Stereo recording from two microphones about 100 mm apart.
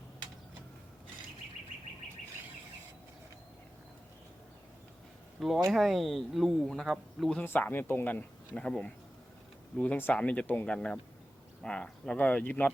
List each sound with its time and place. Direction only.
5.4 s speech: centre (ahead or behind)
7.3 s speech: 20° left (ahead or behind)